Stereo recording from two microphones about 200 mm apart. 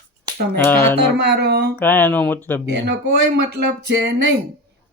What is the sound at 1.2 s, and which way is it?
Speech, 55° right (ahead or behind).